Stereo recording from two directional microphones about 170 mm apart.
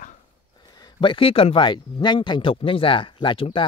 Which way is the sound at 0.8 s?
30° left (ahead or behind).